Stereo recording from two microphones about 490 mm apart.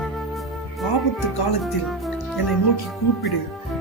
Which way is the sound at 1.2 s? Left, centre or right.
Left.